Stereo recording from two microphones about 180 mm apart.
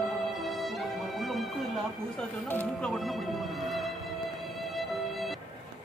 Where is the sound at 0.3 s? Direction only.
Centre (ahead or behind).